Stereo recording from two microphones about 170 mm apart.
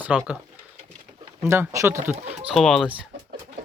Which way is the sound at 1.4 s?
15° right (ahead or behind).